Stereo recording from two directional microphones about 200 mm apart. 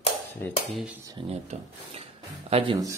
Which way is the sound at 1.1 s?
30° right (ahead or behind).